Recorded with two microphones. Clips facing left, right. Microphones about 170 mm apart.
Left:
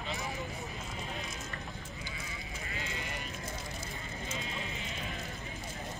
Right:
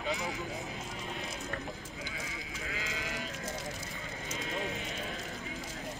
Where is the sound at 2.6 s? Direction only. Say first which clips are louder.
Right 2 dB; 90° right.